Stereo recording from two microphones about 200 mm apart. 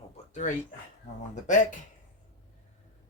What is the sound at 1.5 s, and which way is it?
Speech, 40° left (ahead or behind).